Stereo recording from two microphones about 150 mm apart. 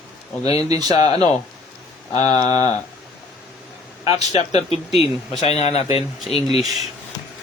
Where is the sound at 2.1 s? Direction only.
45° left (ahead or behind).